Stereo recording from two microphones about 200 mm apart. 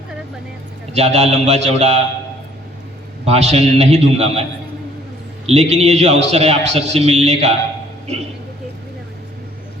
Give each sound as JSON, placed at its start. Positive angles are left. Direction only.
{"t": 0.9, "sound": "a man's voice", "side_deg": -35}
{"t": 3.2, "sound": "a man's voice", "side_deg": -30}
{"t": 5.5, "sound": "a man's voice", "side_deg": -35}